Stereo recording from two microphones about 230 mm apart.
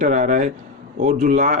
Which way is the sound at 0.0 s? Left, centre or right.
Right.